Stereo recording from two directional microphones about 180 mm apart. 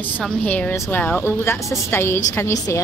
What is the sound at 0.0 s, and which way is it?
A woman's voice, 10° left (ahead or behind).